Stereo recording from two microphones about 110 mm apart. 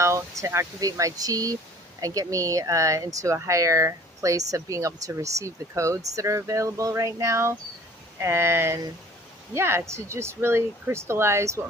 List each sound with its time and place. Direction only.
0.0 s speech: 25° right (ahead or behind)